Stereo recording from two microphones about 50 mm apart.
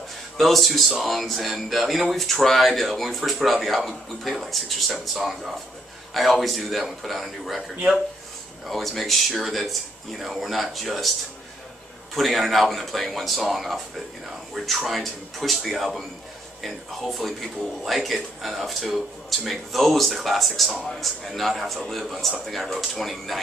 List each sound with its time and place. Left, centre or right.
0.4 s speech: centre
8.6 s speech: centre